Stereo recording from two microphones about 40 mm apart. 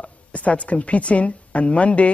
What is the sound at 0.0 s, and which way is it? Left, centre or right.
A woman's voice, left.